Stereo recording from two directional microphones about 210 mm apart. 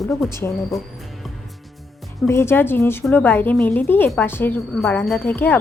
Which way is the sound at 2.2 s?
10° left (ahead or behind).